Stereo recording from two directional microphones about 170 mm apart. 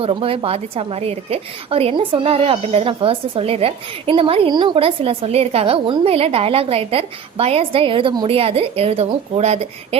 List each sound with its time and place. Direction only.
0.0 s a woman's voice: 35° right (ahead or behind)